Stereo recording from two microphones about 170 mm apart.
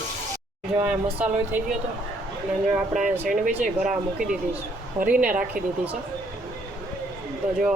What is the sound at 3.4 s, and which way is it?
A woman's voice, 50° right (ahead or behind).